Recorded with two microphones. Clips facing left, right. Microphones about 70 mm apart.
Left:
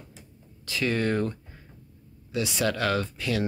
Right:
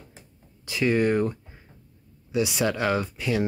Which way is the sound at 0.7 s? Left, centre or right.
Centre.